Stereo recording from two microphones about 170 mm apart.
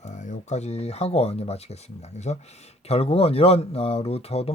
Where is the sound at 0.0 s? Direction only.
45° left (ahead or behind).